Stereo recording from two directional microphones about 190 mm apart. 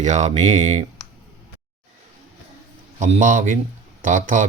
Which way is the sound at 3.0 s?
40° right (ahead or behind).